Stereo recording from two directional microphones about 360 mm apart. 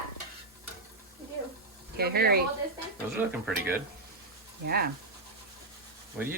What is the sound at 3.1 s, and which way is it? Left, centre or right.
Speech, centre.